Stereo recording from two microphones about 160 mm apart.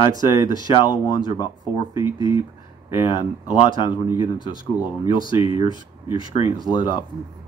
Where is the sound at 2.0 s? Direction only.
20° right (ahead or behind).